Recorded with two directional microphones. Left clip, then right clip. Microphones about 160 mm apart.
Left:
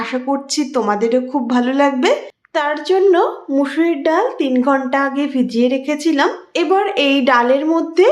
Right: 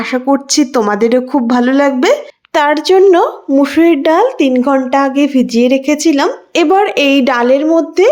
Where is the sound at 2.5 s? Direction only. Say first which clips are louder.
Right 7 dB; 60° right (ahead or behind); by 8.0 s 25° right (ahead or behind).